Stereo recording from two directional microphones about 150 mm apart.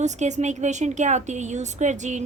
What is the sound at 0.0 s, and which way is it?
A woman's voice, 50° right (ahead or behind).